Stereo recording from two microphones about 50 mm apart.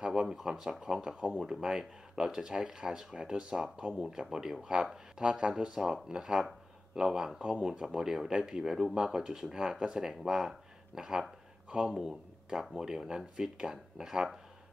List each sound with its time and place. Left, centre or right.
0.0 s speech: centre